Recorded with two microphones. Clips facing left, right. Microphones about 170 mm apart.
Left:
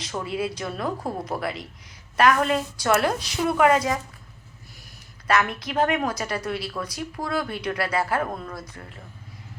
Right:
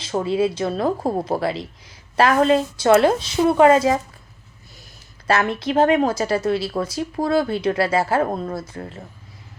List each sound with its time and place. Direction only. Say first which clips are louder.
0.0 s speech: right 8 dB; 30° right (ahead or behind)
5.3 s speech: right 4 dB; 30° right (ahead or behind)